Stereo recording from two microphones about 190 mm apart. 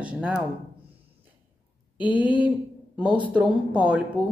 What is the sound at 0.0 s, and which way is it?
Speech, 5° right (ahead or behind).